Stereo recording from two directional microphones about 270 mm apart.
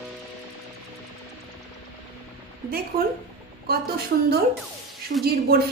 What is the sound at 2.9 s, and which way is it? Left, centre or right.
Speech, right.